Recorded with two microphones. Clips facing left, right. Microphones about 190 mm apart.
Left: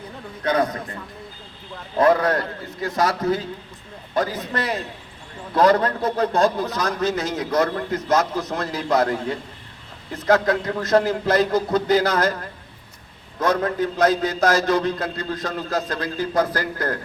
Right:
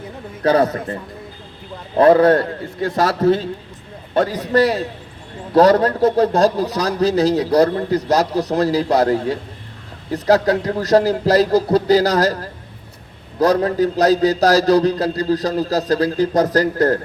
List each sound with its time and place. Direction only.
0.4 s a man's voice: 35° right (ahead or behind)
2.0 s a man's voice: 30° right (ahead or behind)